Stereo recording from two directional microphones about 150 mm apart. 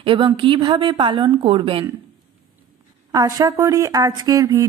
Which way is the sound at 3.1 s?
25° right (ahead or behind).